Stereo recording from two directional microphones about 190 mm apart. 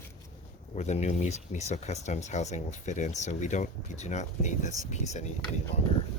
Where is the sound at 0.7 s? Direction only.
35° left (ahead or behind).